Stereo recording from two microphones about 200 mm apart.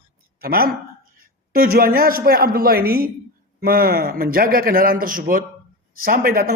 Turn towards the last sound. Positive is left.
turn(degrees=-45)  # may be behind; listen again after turning